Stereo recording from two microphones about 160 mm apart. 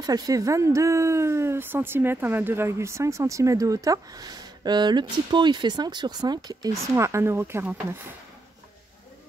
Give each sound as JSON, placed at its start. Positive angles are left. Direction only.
{"t": 0.0, "sound": "speech", "side_deg": -25}